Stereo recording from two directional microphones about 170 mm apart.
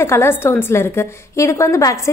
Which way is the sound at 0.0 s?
15° left (ahead or behind).